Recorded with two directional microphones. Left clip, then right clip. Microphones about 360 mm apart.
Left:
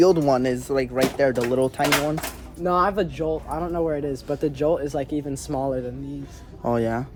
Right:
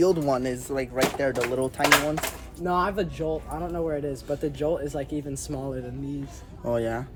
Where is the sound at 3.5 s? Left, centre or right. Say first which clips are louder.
Left 4 dB; left.